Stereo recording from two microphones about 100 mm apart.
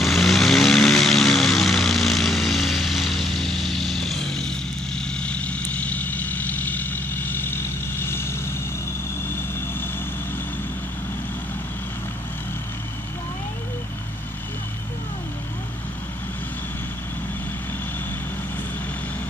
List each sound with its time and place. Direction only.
0.0 s vehicle: centre (ahead or behind); by 8.3 s 25° left (ahead or behind)